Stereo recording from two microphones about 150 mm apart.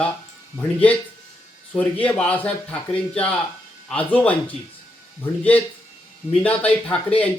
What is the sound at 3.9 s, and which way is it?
Speech, 10° left (ahead or behind).